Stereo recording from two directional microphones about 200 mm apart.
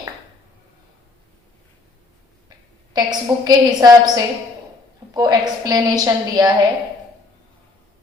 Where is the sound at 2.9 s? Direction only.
20° right (ahead or behind).